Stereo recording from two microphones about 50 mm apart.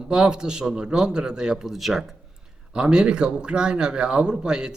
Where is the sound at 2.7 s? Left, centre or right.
Centre.